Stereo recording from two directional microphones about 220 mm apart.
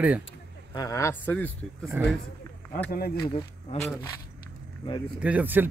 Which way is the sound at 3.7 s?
30° left (ahead or behind).